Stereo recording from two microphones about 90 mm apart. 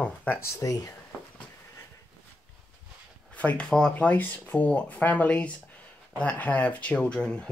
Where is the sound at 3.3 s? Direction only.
15° left (ahead or behind).